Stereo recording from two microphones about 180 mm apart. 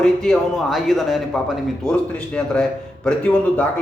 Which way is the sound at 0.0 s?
5° left (ahead or behind).